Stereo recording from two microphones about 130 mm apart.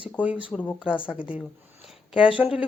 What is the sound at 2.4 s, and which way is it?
Speech, 10° right (ahead or behind).